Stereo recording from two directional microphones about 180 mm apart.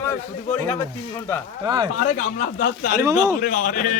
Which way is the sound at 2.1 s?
40° left (ahead or behind).